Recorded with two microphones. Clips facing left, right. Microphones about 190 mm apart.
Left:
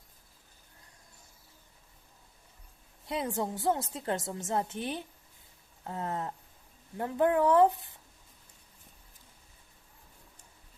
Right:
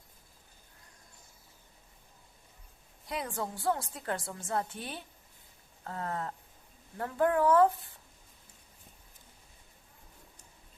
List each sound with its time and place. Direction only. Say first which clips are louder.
3.1 s a woman's voice: left 4 dB; 25° left (ahead or behind)